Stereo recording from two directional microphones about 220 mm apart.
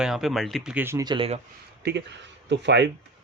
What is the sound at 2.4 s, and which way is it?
Speech, 50° right (ahead or behind).